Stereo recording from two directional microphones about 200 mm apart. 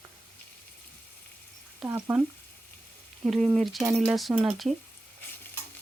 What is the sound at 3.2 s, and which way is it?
Stir, centre (ahead or behind).